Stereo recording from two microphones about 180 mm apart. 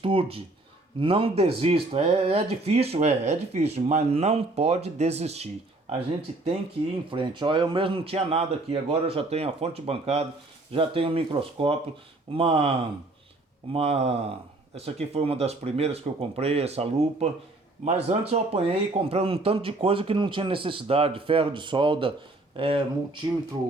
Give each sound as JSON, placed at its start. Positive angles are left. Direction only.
{"t": 0.0, "sound": "speech", "side_deg": -30}
{"t": 7.1, "sound": "speech", "side_deg": -25}
{"t": 13.7, "sound": "speech", "side_deg": -35}